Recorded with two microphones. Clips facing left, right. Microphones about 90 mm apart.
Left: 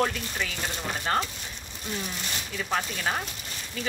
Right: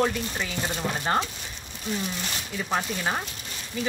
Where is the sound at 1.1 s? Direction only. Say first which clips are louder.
Right 1 dB; 20° right (ahead or behind).